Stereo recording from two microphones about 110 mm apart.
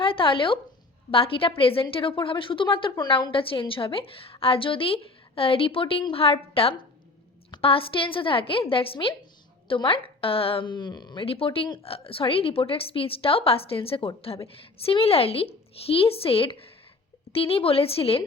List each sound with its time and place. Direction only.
0.0 s a woman's voice: 55° left (ahead or behind)
11.3 s a woman's voice: 55° left (ahead or behind)